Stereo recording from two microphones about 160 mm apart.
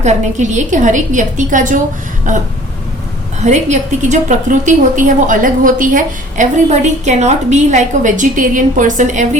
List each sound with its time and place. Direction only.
0.0 s a woman's voice: 50° right (ahead or behind)